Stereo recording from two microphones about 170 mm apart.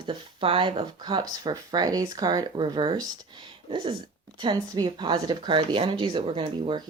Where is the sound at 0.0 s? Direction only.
30° right (ahead or behind).